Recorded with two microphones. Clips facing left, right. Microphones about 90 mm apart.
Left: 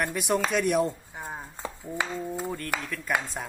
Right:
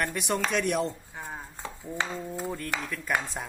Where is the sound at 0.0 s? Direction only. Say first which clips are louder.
Left 2 dB; centre (ahead or behind).